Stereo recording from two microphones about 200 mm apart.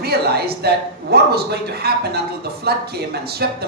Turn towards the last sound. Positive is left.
turn(degrees=-55)  # may be behind; listen again after turning